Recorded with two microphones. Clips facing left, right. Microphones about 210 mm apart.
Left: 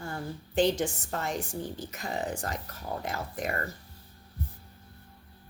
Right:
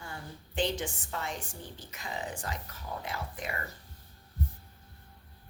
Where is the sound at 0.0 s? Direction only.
40° left (ahead or behind).